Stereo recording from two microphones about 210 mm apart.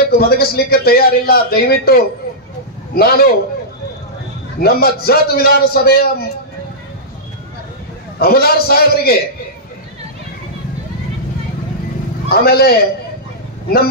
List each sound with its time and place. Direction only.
0.1 s a man's voice: 45° left (ahead or behind)
4.6 s a man's voice: 45° left (ahead or behind)
8.2 s a man's voice: 45° left (ahead or behind)
12.3 s a man's voice: 50° left (ahead or behind)